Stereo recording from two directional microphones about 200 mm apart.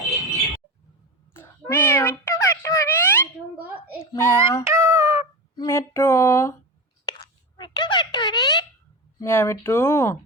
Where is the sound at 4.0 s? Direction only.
15° left (ahead or behind).